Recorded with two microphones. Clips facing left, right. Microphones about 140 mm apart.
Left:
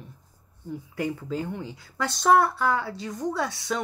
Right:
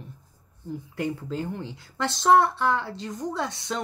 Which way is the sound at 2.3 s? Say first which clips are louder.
Right 2 dB; 25° right (ahead or behind).